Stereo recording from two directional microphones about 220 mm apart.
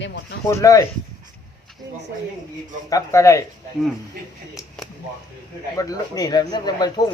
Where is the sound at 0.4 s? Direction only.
15° left (ahead or behind).